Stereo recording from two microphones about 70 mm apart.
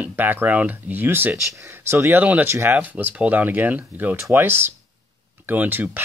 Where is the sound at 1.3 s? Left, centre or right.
Right.